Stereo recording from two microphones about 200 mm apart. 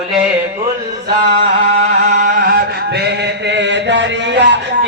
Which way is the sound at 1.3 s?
50° right (ahead or behind).